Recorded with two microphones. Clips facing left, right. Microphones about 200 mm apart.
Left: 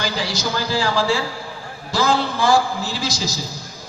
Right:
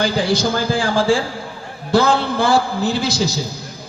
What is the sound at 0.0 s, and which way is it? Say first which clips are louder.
A man's voice: right 7 dB; 55° right (ahead or behind).